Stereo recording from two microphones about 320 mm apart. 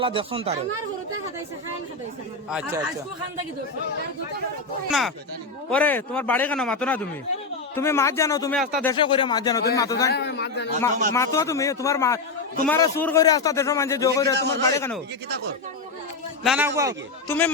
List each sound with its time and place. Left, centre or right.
0.0 s speech: centre
2.5 s a man's voice: centre
4.9 s a man's voice: centre
10.1 s a man's voice: left
11.1 s speech: centre
16.4 s a man's voice: centre
17.2 s speech: centre